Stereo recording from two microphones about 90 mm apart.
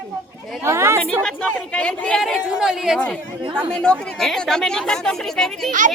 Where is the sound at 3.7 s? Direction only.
10° left (ahead or behind).